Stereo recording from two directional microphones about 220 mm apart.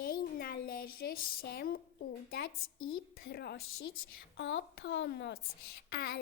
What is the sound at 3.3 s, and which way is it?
A child's voice, 45° left (ahead or behind).